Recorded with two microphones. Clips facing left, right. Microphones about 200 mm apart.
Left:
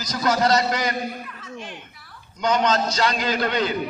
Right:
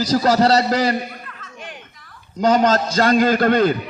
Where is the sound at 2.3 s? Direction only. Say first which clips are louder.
Right 5 dB; 35° right (ahead or behind).